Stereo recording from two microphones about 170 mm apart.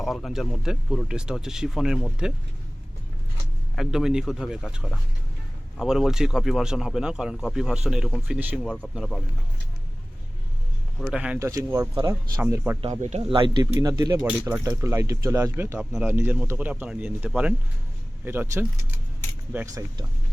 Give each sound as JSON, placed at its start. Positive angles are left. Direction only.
{"t": 0.0, "sound": "a man's voice", "side_deg": 0}
{"t": 3.8, "sound": "a man's voice", "side_deg": -5}
{"t": 11.0, "sound": "speech", "side_deg": -5}
{"t": 11.3, "sound": "speech", "side_deg": -20}
{"t": 12.8, "sound": "speech", "side_deg": -45}
{"t": 13.2, "sound": "speech", "side_deg": -30}